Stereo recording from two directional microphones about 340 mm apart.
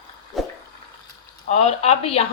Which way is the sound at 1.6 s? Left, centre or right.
Centre.